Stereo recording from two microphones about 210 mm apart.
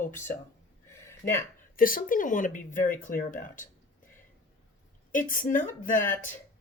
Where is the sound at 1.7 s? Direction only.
40° left (ahead or behind).